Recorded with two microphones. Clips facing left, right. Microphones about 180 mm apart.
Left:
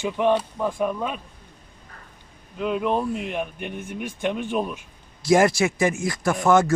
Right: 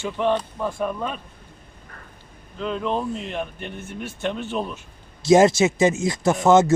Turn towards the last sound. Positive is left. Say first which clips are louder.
# right 3 dB
turn(degrees=-25)  # may be behind; listen again after turning